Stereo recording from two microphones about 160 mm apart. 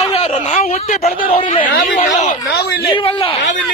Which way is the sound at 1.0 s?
60° left (ahead or behind).